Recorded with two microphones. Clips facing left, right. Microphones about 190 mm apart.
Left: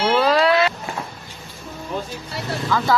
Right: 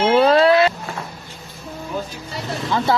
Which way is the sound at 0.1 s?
25° right (ahead or behind).